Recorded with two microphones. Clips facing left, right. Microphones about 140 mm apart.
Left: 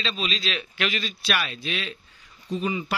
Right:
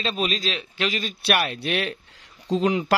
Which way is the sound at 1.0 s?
60° right (ahead or behind).